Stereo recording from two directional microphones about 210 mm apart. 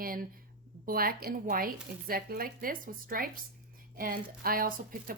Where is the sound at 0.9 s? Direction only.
45° right (ahead or behind).